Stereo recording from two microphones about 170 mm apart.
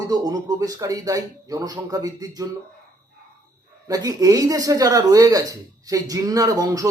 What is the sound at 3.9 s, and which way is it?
Speech, 20° right (ahead or behind).